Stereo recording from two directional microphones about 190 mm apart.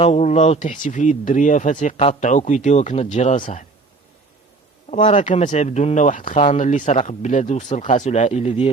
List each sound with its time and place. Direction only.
0.0 s speech: 35° left (ahead or behind)
4.9 s speech: 40° left (ahead or behind)